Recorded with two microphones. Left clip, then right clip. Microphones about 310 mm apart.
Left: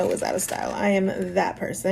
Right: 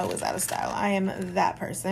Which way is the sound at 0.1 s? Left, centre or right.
Centre.